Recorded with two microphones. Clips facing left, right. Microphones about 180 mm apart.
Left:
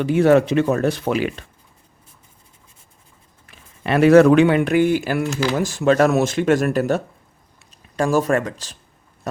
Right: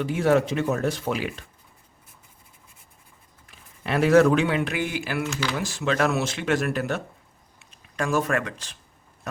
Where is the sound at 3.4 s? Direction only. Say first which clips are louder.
Left 7 dB; 70° left (ahead or behind).